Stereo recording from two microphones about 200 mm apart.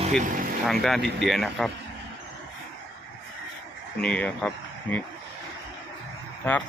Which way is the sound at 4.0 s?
5° left (ahead or behind).